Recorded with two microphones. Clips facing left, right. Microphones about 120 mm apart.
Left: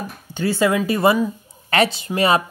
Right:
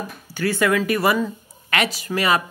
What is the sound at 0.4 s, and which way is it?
Speech, 20° left (ahead or behind).